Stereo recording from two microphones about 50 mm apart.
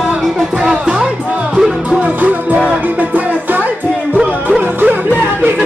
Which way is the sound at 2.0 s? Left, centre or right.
Right.